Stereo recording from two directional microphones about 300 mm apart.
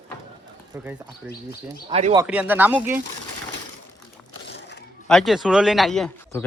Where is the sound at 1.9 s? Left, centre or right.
Centre.